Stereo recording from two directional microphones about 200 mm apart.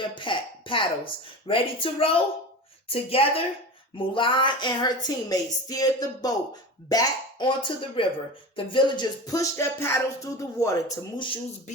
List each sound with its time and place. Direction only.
0.1 s cough: 25° left (ahead or behind)
1.5 s speech: 25° left (ahead or behind)
8.5 s music: 25° left (ahead or behind)